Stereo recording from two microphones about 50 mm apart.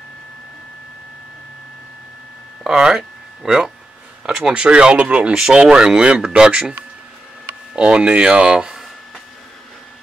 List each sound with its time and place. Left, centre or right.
2.6 s speech: centre
7.7 s speech: right